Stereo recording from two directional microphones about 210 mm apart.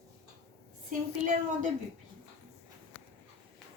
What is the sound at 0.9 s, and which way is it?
Speech, 35° right (ahead or behind).